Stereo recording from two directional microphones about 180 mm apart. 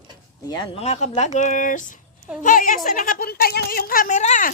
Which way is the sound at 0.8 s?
40° left (ahead or behind).